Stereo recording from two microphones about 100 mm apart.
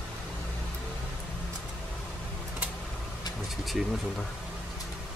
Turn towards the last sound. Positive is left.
turn(degrees=0)  # may be behind; listen again after turning